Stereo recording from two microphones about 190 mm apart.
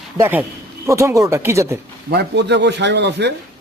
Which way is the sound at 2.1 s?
60° right (ahead or behind).